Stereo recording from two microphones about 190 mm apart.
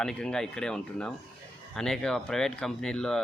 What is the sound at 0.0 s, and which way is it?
Speech, 5° left (ahead or behind).